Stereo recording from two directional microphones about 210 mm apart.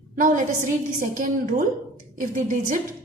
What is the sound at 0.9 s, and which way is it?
A woman's voice, 40° right (ahead or behind).